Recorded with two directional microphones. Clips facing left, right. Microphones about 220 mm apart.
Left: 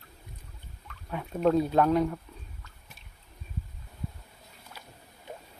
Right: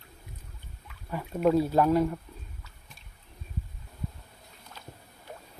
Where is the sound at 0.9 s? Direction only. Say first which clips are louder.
Right 1 dB; 5° right (ahead or behind).